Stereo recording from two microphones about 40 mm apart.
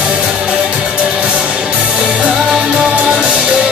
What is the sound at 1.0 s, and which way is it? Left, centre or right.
Music, right.